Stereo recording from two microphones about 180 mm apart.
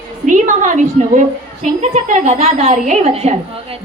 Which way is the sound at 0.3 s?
45° right (ahead or behind).